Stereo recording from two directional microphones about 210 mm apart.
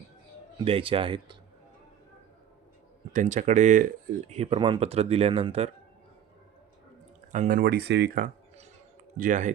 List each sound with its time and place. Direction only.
0.6 s speech: 25° right (ahead or behind)
3.1 s speech: 35° right (ahead or behind)
7.3 s speech: 40° right (ahead or behind)